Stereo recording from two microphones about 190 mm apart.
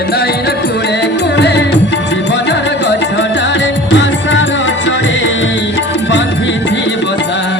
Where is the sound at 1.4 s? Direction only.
65° left (ahead or behind).